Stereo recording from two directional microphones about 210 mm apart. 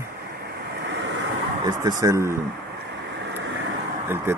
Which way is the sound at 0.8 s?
60° right (ahead or behind).